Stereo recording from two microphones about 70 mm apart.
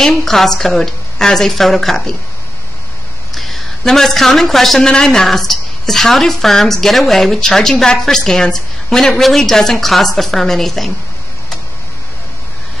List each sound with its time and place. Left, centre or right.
0.0 s speech: centre
3.3 s speech: centre